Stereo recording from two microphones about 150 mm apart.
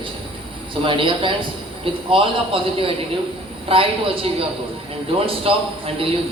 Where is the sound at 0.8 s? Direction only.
35° right (ahead or behind).